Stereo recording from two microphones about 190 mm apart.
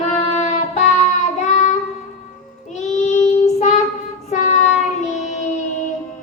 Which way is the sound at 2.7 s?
35° left (ahead or behind).